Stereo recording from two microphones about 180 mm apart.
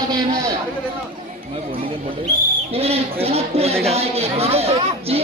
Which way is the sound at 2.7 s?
35° right (ahead or behind).